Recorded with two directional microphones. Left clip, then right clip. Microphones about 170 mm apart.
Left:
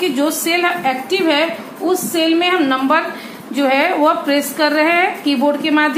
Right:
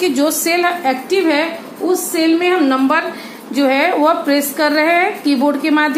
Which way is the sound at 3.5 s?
55° right (ahead or behind).